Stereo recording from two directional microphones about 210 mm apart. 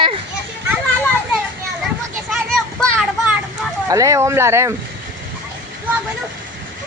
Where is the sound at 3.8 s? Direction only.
15° right (ahead or behind).